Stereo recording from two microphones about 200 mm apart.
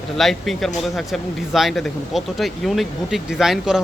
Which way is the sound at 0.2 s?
Centre (ahead or behind).